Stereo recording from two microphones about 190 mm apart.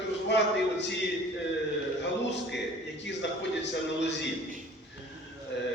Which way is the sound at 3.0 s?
65° left (ahead or behind).